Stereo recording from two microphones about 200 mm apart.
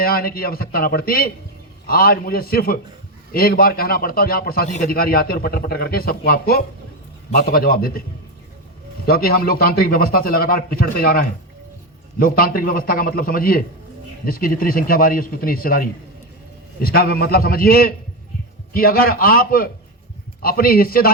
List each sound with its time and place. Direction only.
0.0 s a man's voice: 50° left (ahead or behind)
9.0 s a man's voice: 50° left (ahead or behind)